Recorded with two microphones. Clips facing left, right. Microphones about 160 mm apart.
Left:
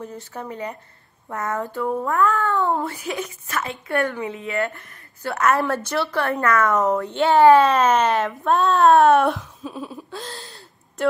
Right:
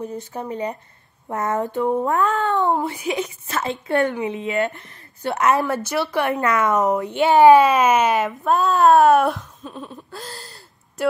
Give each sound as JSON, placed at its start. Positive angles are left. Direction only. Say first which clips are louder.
{"t": 0.0, "sound": "a child's voice", "louder": "right 4 dB", "side_deg": -15}